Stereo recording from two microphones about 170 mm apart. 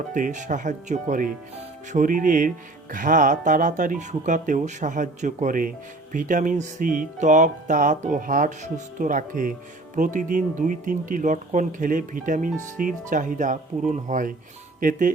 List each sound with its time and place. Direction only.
0.1 s speech: 50° right (ahead or behind)